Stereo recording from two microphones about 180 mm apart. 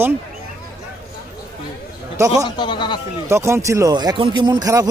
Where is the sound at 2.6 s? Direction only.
25° left (ahead or behind).